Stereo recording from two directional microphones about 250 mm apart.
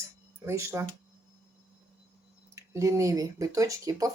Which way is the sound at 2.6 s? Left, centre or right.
Centre.